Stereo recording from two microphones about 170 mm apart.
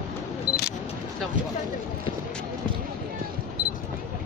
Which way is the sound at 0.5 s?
20° left (ahead or behind).